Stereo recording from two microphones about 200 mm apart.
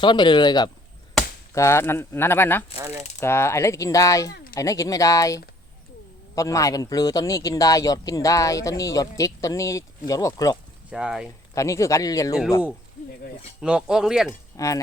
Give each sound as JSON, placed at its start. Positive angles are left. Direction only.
{"t": 0.0, "sound": "speech", "side_deg": 25}
{"t": 10.9, "sound": "speech", "side_deg": -5}
{"t": 11.5, "sound": "speech", "side_deg": 15}
{"t": 13.6, "sound": "speech", "side_deg": -5}
{"t": 14.5, "sound": "speech", "side_deg": 15}